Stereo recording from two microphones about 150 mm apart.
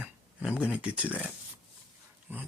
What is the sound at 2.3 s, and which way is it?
Speech, 15° right (ahead or behind).